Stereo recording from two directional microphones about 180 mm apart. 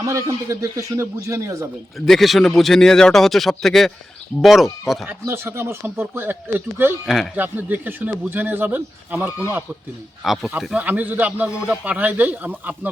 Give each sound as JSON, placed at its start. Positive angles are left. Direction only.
{"t": 0.0, "sound": "a man's voice", "side_deg": -20}
{"t": 2.0, "sound": "a man's voice", "side_deg": 0}
{"t": 5.0, "sound": "a man's voice", "side_deg": -15}
{"t": 10.2, "sound": "a man's voice", "side_deg": 0}